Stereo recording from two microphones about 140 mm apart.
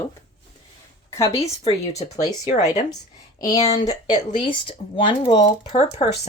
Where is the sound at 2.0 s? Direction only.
50° left (ahead or behind).